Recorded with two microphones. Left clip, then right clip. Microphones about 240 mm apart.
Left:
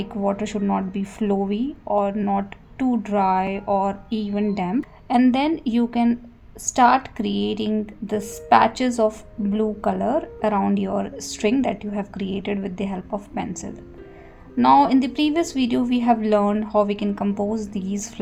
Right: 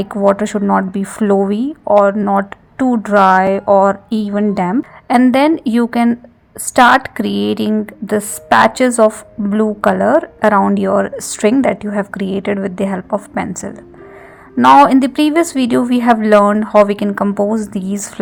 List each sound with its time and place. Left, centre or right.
0.0 s speech: right